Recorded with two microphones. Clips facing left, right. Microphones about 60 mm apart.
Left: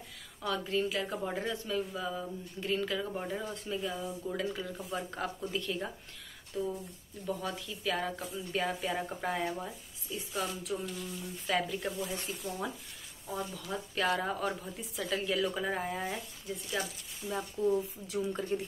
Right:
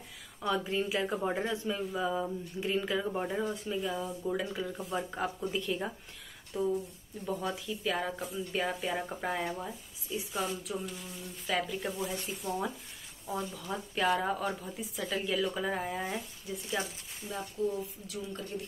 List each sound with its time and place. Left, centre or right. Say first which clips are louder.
0.4 s speech: right 1 dB; centre
6.5 s a woman's voice: right 3 dB; right
7.2 s speech: right 2 dB; centre
13.3 s speech: right 1 dB; centre
16.6 s a woman's voice: right 1 dB; right
17.6 s speech: left 2 dB; centre
18.0 s speech: left 5 dB; left